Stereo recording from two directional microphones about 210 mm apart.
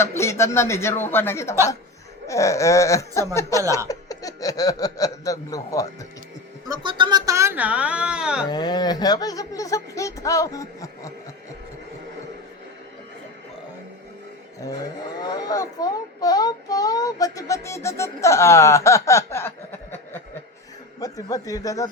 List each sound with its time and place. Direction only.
0.0 s speech: 10° left (ahead or behind)
6.7 s speech: 20° right (ahead or behind); by 8.4 s 5° right (ahead or behind)
8.4 s speech: 20° left (ahead or behind)
15.2 s speech: 20° left (ahead or behind)
21.0 s speech: 15° left (ahead or behind)